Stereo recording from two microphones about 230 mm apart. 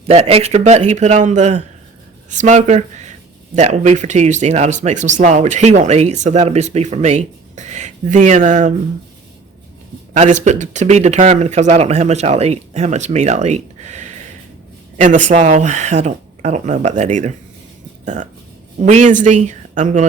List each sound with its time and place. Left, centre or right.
0.1 s speech: right
10.2 s speech: right